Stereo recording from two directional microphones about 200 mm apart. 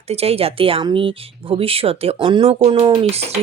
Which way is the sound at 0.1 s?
30° right (ahead or behind).